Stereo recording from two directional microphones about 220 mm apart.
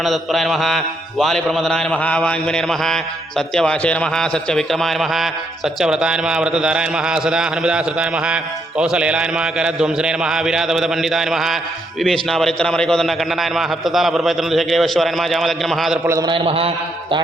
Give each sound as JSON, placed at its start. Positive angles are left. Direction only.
{"t": 0.0, "sound": "speech", "side_deg": 0}
{"t": 16.0, "sound": "a man's voice", "side_deg": -15}